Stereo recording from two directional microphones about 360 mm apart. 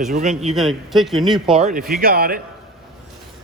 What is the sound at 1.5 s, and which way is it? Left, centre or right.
Speech, centre.